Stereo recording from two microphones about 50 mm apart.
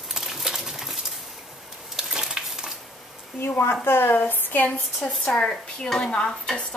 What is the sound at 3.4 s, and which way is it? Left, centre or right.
Speech, left.